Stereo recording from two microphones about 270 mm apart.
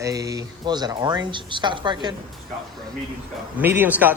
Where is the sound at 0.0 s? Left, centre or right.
Centre.